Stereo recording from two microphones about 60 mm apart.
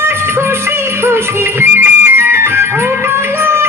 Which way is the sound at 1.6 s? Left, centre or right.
Right.